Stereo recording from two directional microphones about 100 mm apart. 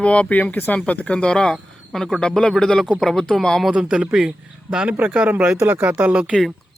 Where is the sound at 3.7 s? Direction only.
10° right (ahead or behind).